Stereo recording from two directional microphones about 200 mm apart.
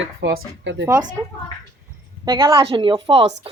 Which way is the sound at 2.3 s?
20° right (ahead or behind).